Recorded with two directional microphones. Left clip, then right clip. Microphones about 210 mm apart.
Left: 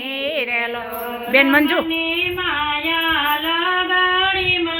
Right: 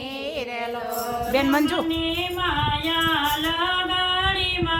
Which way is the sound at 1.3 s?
Centre (ahead or behind).